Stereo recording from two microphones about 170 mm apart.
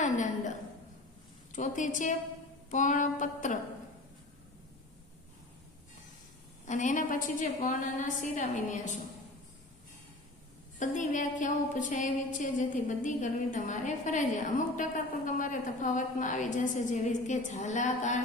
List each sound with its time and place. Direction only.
0.0 s a sound: 45° left (ahead or behind)
1.5 s a woman's voice: 50° left (ahead or behind)
6.7 s a woman's voice: 45° left (ahead or behind)
10.8 s a woman's voice: 45° left (ahead or behind)